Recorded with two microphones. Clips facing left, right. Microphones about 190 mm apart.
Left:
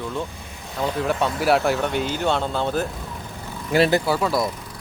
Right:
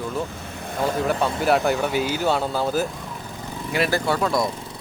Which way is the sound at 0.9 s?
Centre (ahead or behind).